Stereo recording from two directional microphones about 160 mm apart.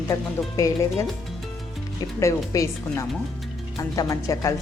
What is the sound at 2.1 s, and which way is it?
Speech, 20° left (ahead or behind).